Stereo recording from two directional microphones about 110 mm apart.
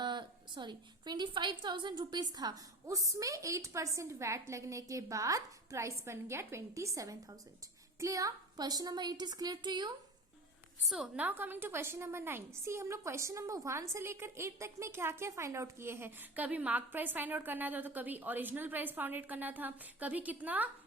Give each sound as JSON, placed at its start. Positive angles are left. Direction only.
{"t": 0.0, "sound": "a woman's voice", "side_deg": -45}
{"t": 10.8, "sound": "a woman's voice", "side_deg": -5}
{"t": 11.2, "sound": "a woman's voice", "side_deg": -15}